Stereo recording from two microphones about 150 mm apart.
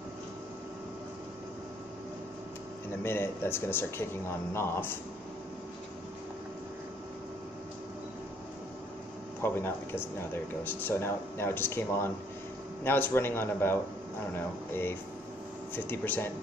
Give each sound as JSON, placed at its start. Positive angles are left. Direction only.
{"t": 3.0, "sound": "speech", "side_deg": 15}
{"t": 9.4, "sound": "speech", "side_deg": 15}